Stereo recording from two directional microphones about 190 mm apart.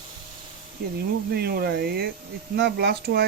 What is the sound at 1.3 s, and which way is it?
Speech, 55° right (ahead or behind).